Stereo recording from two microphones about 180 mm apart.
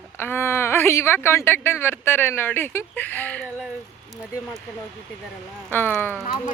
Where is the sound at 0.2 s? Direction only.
15° left (ahead or behind).